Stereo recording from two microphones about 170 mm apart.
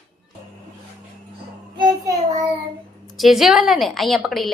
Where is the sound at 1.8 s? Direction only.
20° right (ahead or behind).